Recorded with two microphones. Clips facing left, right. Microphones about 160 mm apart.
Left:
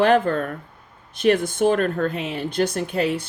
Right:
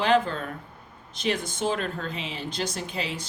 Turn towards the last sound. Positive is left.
turn(degrees=60)  # may be behind; listen again after turning